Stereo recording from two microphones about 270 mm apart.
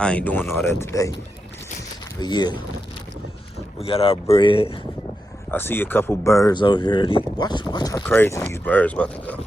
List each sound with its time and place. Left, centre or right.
0.0 s speech: centre
2.2 s speech: centre
3.8 s speech: left
5.5 s speech: centre